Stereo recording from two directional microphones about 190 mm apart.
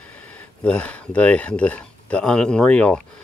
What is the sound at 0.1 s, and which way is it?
Speech, 10° left (ahead or behind).